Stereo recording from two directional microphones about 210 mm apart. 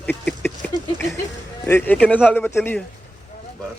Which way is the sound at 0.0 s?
5° left (ahead or behind).